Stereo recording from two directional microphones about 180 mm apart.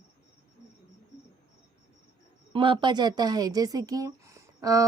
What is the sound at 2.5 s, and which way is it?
Speech, 30° right (ahead or behind).